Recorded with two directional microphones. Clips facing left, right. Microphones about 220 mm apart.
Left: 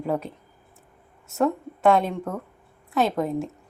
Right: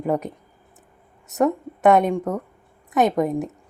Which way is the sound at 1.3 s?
20° right (ahead or behind).